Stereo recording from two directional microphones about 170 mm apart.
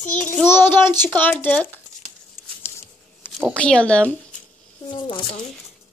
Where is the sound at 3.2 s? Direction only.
10° left (ahead or behind).